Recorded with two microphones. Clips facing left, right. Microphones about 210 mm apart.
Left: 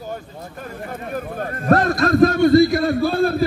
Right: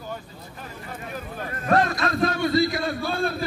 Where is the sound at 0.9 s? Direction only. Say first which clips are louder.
Left 7 dB; 50° left (ahead or behind).